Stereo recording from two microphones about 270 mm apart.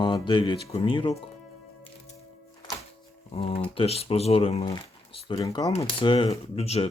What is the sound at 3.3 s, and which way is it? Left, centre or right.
Speech, left.